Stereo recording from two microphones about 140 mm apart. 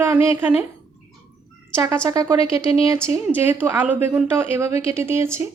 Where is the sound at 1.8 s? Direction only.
25° right (ahead or behind).